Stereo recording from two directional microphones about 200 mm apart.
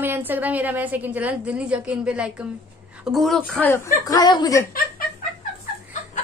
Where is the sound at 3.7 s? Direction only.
15° left (ahead or behind).